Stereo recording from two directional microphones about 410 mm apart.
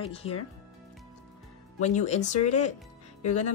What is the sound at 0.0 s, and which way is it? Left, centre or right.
Speech, centre.